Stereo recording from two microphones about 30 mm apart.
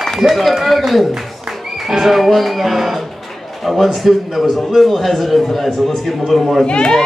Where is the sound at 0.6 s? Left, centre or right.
Centre.